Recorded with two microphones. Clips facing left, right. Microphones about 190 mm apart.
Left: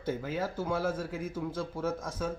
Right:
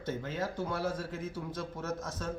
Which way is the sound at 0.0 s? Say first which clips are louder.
Left 3 dB; 10° left (ahead or behind).